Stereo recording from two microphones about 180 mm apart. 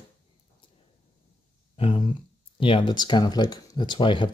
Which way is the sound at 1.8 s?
30° left (ahead or behind).